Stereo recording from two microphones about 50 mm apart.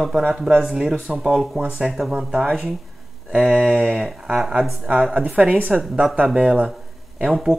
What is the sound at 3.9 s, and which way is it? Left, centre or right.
Speech, centre.